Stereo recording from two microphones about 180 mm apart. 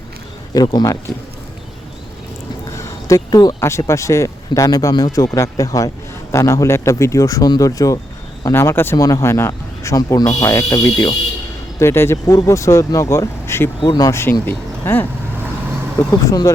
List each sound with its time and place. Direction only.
0.5 s speech: 20° left (ahead or behind)
2.7 s speech: 20° left (ahead or behind)
16.2 s speech: 20° left (ahead or behind)